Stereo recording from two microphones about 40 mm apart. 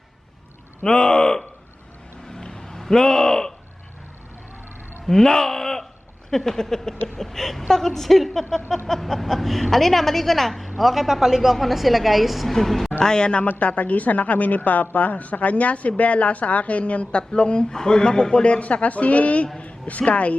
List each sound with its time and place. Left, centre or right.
0.9 s speech: centre
2.3 s a sound: centre
5.0 s a woman's voice: centre
13.0 s speech: left
13.6 s a woman's voice: left
18.6 s a woman's voice: left